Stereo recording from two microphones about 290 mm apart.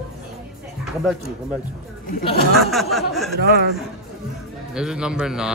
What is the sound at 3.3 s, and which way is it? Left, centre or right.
Speech, right.